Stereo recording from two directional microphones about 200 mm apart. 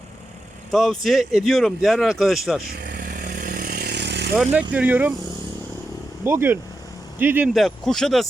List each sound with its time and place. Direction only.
0.7 s speech: centre (ahead or behind)
2.6 s vehicle: 45° right (ahead or behind)
4.7 s speech: 10° right (ahead or behind)
6.2 s speech: 10° right (ahead or behind)